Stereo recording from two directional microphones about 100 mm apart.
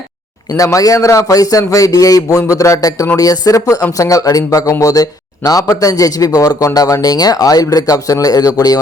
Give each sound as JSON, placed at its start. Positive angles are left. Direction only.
{"t": 0.5, "sound": "speech", "side_deg": 35}